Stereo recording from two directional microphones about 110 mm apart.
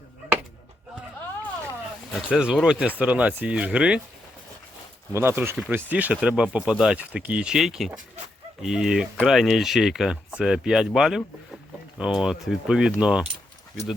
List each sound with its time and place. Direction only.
2.1 s speech: 5° right (ahead or behind)
5.1 s speech: 20° right (ahead or behind)